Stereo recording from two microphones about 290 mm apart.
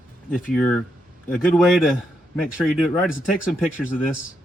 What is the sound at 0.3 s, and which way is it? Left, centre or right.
A man's voice, centre.